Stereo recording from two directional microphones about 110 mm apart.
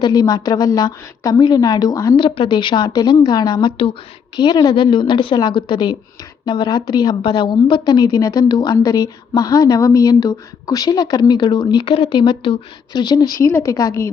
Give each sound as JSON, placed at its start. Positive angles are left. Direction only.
{"t": 0.0, "sound": "a woman's voice", "side_deg": 35}
{"t": 2.1, "sound": "a woman's voice", "side_deg": 45}
{"t": 4.4, "sound": "a woman's voice", "side_deg": 40}